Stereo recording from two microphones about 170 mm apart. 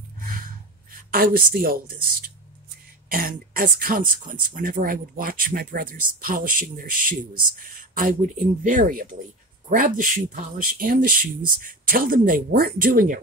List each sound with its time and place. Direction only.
0.9 s speech: 60° right (ahead or behind)
3.1 s speech: 60° right (ahead or behind)